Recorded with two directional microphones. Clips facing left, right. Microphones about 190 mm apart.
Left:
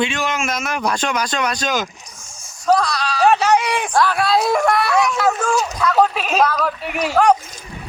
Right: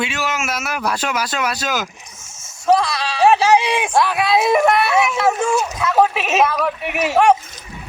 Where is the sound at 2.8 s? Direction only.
25° right (ahead or behind).